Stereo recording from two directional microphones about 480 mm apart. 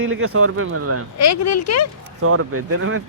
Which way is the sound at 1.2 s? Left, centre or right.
Left.